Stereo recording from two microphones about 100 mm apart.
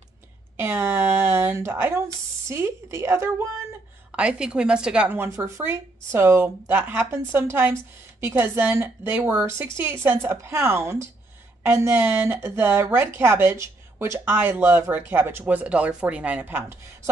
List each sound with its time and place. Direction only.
0.6 s speech: 25° right (ahead or behind)
4.1 s a woman's voice: 10° right (ahead or behind)
5.1 s speech: 25° right (ahead or behind)